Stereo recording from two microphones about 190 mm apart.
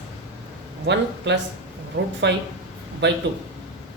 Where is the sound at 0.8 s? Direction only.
65° right (ahead or behind).